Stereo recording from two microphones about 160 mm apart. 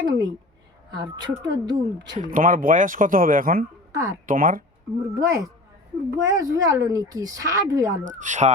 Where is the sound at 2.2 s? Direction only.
55° right (ahead or behind).